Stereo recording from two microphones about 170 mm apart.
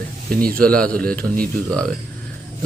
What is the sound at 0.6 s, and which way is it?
Speech, 5° left (ahead or behind).